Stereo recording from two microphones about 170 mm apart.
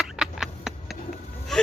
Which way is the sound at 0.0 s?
5° right (ahead or behind).